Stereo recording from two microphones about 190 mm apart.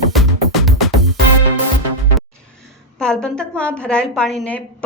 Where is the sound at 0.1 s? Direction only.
Centre (ahead or behind).